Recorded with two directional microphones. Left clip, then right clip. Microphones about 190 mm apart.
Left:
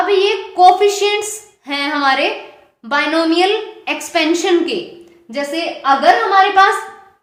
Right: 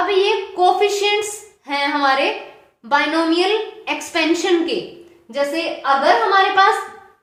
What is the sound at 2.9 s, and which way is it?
A woman's voice, 30° left (ahead or behind).